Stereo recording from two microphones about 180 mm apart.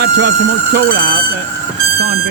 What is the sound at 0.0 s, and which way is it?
Speech, 65° right (ahead or behind).